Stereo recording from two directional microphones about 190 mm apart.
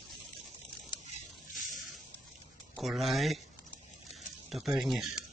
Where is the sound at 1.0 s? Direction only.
45° left (ahead or behind).